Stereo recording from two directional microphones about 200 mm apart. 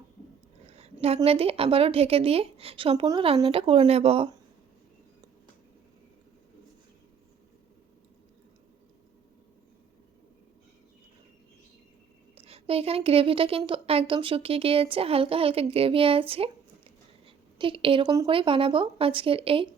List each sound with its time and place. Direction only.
0.7 s a woman's voice: 30° right (ahead or behind)
12.4 s a woman's voice: 30° right (ahead or behind)